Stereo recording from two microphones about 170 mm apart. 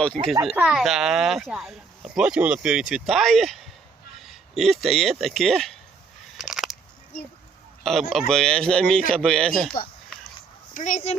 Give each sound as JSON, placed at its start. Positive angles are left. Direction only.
{"t": 0.0, "sound": "speech", "side_deg": 5}
{"t": 6.3, "sound": "a sound", "side_deg": 0}
{"t": 7.9, "sound": "speech", "side_deg": 0}
{"t": 10.8, "sound": "speech", "side_deg": 45}